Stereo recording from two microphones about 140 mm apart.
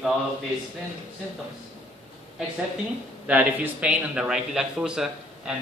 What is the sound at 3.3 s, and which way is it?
A man's voice, 10° right (ahead or behind).